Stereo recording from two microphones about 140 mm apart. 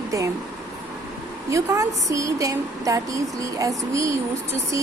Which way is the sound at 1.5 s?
20° right (ahead or behind).